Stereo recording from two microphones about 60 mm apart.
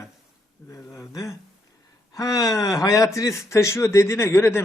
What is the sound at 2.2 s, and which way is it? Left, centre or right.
A man's voice, left.